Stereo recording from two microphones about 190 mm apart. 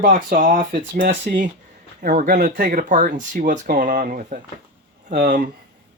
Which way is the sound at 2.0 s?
45° right (ahead or behind).